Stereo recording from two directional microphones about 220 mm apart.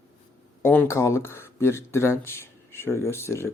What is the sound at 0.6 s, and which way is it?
Speech, 10° left (ahead or behind).